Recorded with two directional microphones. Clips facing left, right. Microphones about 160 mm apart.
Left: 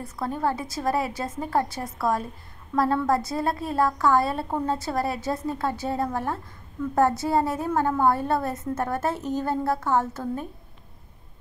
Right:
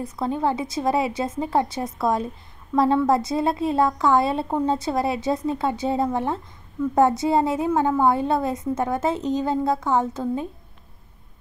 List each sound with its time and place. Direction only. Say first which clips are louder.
0.0 s a woman's voice: right 3 dB; 20° right (ahead or behind)